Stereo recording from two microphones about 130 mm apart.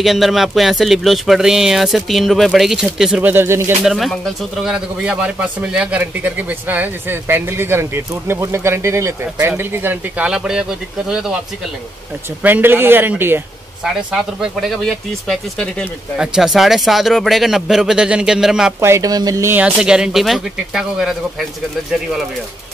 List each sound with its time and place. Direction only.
0.0 s speech: centre (ahead or behind); by 3.7 s 20° right (ahead or behind)
3.8 s speech: centre (ahead or behind)
12.4 s speech: 15° right (ahead or behind)
13.8 s speech: 5° right (ahead or behind)
18.8 s speech: 20° right (ahead or behind)
19.5 s speech: 5° right (ahead or behind)